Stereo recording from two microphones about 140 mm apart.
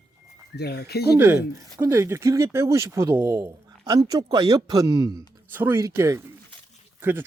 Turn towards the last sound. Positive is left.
turn(degrees=-15)  # may be behind; listen again after turning